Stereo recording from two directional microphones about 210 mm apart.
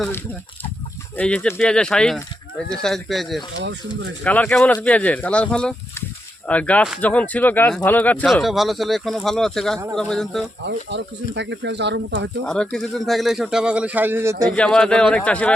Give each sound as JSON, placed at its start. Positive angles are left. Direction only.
{"t": 1.1, "sound": "speech", "side_deg": 5}
{"t": 3.6, "sound": "speech", "side_deg": -55}
{"t": 4.2, "sound": "speech", "side_deg": 5}
{"t": 10.7, "sound": "speech", "side_deg": -55}
{"t": 12.5, "sound": "speech", "side_deg": 5}
{"t": 14.5, "sound": "speech", "side_deg": 5}